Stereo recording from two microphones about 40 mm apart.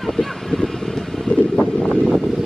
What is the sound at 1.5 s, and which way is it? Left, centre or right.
Wind, left.